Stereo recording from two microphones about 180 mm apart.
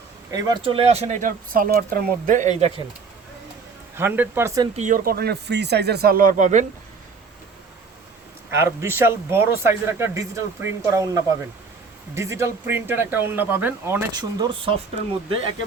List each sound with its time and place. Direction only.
0.3 s speech: 20° right (ahead or behind)
3.9 s speech: 10° right (ahead or behind)
4.8 s speech: 50° right (ahead or behind)
8.4 s speech: 15° right (ahead or behind)
14.1 s speech: 20° right (ahead or behind)